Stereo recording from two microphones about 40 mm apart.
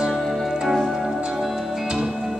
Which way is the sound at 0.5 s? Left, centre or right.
Centre.